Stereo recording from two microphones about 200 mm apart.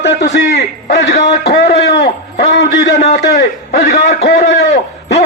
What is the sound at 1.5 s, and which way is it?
A man's voice, 55° left (ahead or behind).